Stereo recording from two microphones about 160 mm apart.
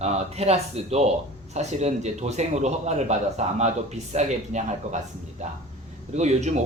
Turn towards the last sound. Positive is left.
turn(degrees=-45)  # may be behind; listen again after turning